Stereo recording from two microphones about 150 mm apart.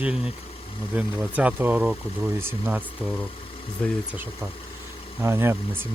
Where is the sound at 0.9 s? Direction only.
10° right (ahead or behind).